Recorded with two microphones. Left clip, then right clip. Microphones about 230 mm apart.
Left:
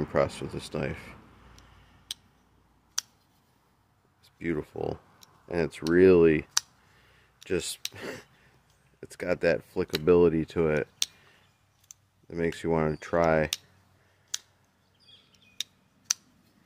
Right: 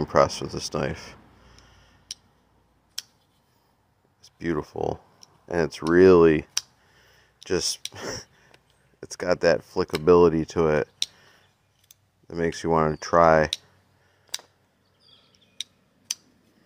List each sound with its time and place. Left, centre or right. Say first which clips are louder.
0.0 s speech: right 7 dB; centre
0.3 s speech: right 6 dB; left
0.7 s speech: right 5 dB; centre
4.4 s speech: right 4 dB; centre
9.4 s speech: right 4 dB; centre
12.3 s speech: right 4 dB; centre